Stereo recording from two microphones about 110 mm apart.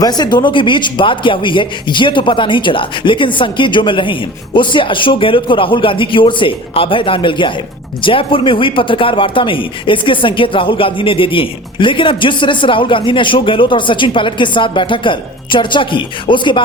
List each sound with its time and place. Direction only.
0.0 s speech: 40° left (ahead or behind)